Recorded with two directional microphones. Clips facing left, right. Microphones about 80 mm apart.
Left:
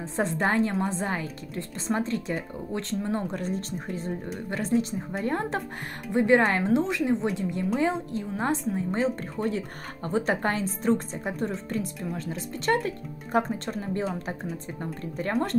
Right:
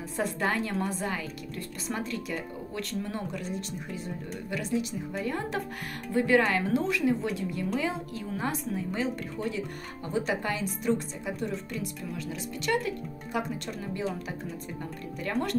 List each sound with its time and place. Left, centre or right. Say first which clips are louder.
0.1 s a woman's voice: left 4 dB; left
6.1 s a woman's voice: left 3 dB; left